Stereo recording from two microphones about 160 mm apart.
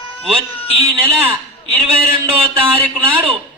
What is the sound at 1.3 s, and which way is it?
A man's voice, 35° right (ahead or behind).